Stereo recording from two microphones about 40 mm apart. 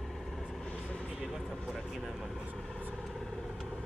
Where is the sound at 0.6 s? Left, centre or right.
Left.